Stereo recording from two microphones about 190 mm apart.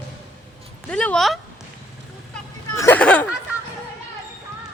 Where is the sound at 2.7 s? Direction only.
10° left (ahead or behind).